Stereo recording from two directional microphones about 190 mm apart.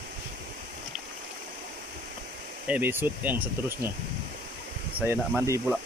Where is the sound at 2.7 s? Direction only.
10° right (ahead or behind).